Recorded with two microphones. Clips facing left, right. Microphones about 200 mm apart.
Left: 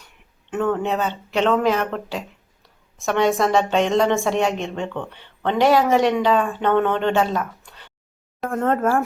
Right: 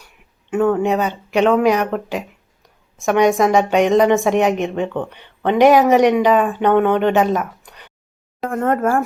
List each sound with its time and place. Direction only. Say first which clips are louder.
0.5 s a woman's voice: right 5 dB; 10° right (ahead or behind)